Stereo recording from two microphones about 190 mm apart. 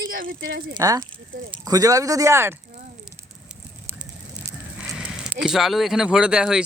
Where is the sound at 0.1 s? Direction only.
50° right (ahead or behind).